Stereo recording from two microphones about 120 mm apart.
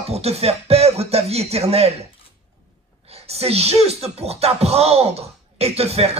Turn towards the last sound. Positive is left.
turn(degrees=-60)  # may be behind; listen again after turning